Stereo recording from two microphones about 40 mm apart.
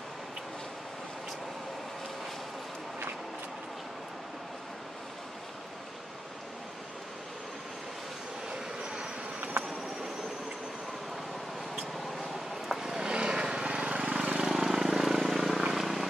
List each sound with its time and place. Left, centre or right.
8.5 s train: centre
12.2 s a sound: centre
13.0 s vehicle: right
14.4 s vehicle: centre